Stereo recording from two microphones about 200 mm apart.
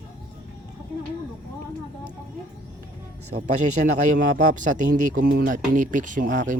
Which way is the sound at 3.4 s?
40° right (ahead or behind).